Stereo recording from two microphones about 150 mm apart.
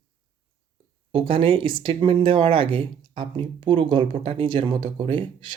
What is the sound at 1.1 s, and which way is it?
Speech, 35° right (ahead or behind).